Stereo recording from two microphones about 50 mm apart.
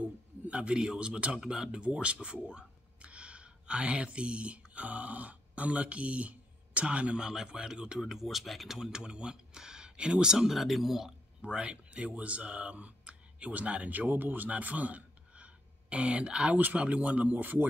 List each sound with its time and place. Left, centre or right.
0.0 s a man's voice: right; by 11.1 s centre
11.4 s a man's voice: right
16.5 s a man's voice: right